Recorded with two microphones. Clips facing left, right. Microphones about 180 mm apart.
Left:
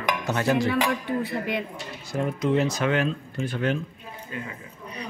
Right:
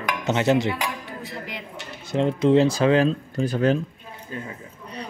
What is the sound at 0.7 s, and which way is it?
Speech, 60° left (ahead or behind).